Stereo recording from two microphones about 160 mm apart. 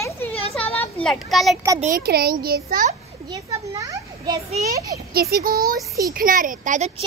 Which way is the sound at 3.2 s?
20° right (ahead or behind).